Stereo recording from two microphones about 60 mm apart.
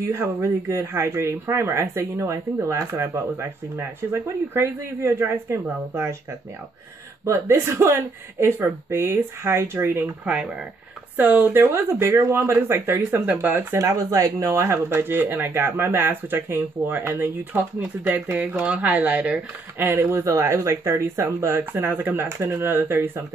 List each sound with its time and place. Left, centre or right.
0.1 s speech: right
7.2 s speech: right
10.2 s speech: centre
11.1 s speech: right
11.5 s speech: right
13.7 s speech: right
13.9 s speech: right
14.9 s speech: right
19.9 s speech: right